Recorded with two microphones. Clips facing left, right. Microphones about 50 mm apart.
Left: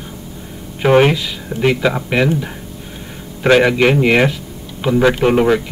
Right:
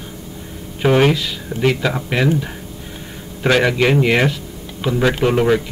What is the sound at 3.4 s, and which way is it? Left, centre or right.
Speech, centre.